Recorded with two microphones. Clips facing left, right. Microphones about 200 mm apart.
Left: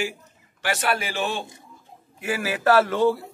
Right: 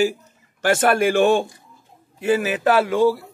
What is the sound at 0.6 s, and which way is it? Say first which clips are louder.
Speech: right 9 dB; 50° right (ahead or behind).